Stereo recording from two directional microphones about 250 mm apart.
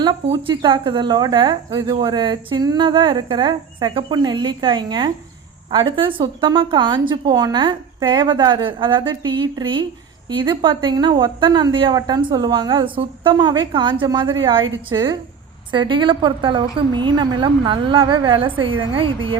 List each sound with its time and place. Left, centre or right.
0.0 s a woman's voice: centre